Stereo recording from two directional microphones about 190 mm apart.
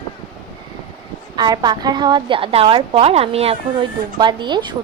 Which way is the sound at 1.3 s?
20° right (ahead or behind).